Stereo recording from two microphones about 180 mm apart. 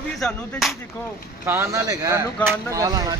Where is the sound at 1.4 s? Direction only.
15° right (ahead or behind).